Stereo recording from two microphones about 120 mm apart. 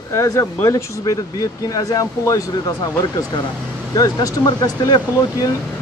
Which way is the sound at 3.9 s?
30° left (ahead or behind).